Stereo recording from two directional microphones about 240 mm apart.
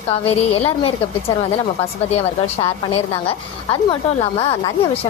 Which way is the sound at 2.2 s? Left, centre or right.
Left.